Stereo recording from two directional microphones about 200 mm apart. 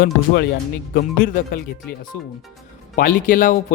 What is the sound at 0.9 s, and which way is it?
Speech, 45° left (ahead or behind).